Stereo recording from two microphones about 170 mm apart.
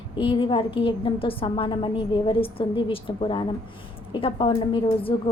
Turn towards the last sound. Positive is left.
turn(degrees=30)  # may be behind; listen again after turning